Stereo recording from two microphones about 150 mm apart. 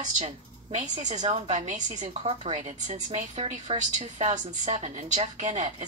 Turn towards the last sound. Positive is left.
turn(degrees=-55)  # may be behind; listen again after turning